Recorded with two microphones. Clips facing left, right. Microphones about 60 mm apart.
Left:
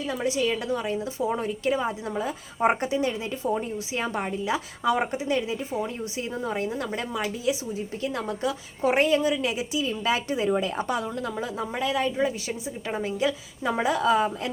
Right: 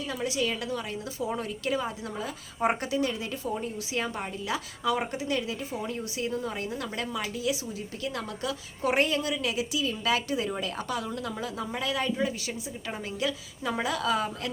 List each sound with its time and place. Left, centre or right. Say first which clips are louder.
0.1 s a woman's voice: left 4 dB; left
3.4 s a woman's voice: left 7 dB; left
5.8 s a woman's voice: left 1 dB; centre